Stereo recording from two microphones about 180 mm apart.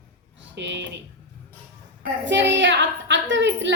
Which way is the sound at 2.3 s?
85° right.